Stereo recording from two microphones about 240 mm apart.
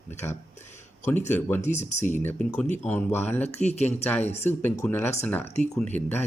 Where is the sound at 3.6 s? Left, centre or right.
Left.